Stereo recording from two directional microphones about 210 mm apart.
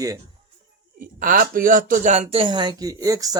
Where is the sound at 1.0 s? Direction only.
40° right (ahead or behind); by 3.4 s 15° right (ahead or behind).